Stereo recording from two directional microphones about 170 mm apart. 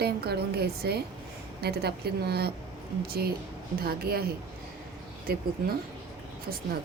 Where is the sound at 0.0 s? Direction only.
70° right (ahead or behind).